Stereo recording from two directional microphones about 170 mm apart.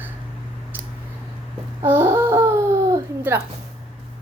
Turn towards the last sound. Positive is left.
turn(degrees=-15)  # may be behind; listen again after turning